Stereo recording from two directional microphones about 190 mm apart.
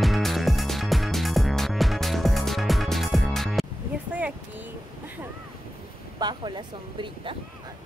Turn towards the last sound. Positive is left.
turn(degrees=-25)  # may be behind; listen again after turning